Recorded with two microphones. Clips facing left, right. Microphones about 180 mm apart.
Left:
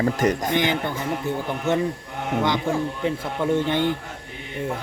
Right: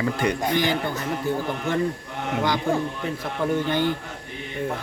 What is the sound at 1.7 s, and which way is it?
Speech, 25° left (ahead or behind).